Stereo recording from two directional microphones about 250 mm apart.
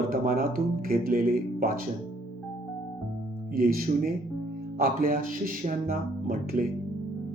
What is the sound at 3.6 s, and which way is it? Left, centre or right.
Speech, right.